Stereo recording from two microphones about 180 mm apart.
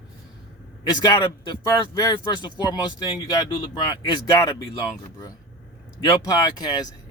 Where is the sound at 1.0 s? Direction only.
20° left (ahead or behind).